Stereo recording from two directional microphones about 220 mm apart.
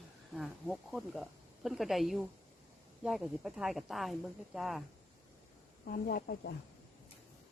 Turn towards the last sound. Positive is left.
turn(degrees=45)  # may be behind; listen again after turning